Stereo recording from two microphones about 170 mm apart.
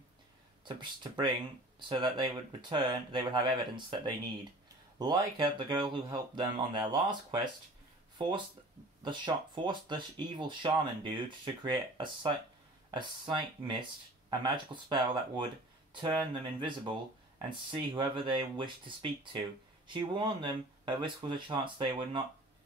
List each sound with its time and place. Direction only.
0.7 s speech: 30° right (ahead or behind)
9.0 s speech: 25° right (ahead or behind)